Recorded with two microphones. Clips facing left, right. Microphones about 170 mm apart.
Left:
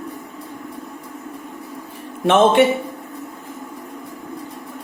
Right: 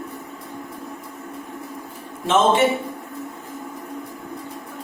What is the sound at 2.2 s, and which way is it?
Speech, 60° left (ahead or behind).